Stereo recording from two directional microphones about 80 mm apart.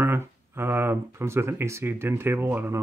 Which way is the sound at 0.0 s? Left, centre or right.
Right.